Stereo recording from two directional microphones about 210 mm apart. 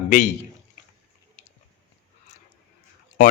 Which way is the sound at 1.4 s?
30° left (ahead or behind).